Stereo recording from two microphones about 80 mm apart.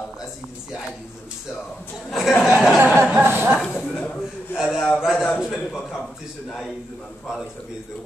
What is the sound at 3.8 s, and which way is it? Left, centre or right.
A man's voice, centre.